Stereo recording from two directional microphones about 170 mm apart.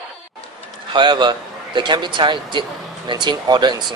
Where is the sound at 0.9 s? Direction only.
30° right (ahead or behind).